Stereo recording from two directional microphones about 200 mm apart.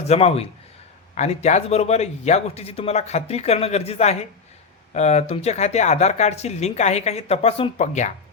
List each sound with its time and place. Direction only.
0.1 s speech: 30° left (ahead or behind)